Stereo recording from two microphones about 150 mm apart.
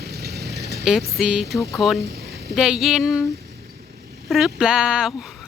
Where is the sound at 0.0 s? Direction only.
90° right.